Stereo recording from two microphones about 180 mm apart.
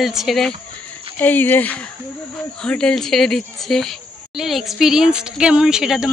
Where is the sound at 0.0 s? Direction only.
Centre (ahead or behind).